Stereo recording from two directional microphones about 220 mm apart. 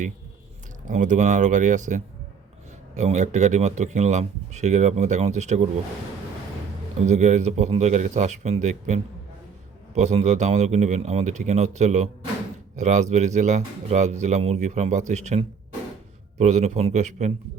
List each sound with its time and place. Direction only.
0.9 s speech: 35° right (ahead or behind)
7.0 s speech: 30° right (ahead or behind)